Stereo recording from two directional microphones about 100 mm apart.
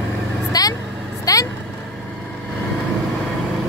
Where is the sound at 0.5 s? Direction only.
40° left (ahead or behind).